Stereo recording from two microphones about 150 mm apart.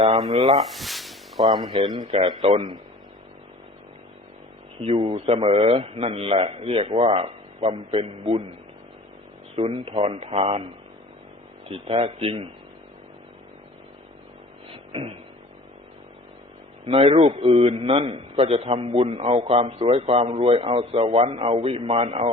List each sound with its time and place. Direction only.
0.5 s speech: centre (ahead or behind)
1.6 s a man's voice: 45° right (ahead or behind)
4.8 s a man's voice: 40° right (ahead or behind)
9.6 s a man's voice: 40° right (ahead or behind)
11.7 s a man's voice: 40° right (ahead or behind)
14.7 s beatboxing: 40° right (ahead or behind)
16.8 s a man's voice: 40° right (ahead or behind)